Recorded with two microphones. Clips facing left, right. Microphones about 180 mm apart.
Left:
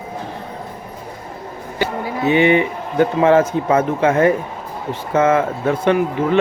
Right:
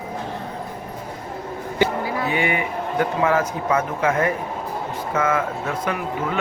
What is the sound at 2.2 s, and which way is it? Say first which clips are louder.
Speech: left 11 dB; 25° left (ahead or behind).